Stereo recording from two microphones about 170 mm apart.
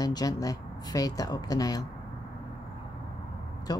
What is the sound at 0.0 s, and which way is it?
Speech, 20° left (ahead or behind).